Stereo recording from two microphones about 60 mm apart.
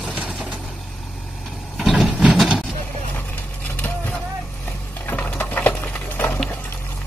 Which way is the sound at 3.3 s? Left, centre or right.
Left.